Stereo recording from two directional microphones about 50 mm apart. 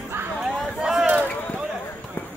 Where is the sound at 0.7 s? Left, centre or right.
Centre.